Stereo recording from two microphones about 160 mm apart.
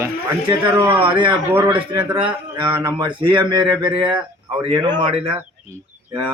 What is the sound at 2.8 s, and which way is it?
Speech, 25° right (ahead or behind).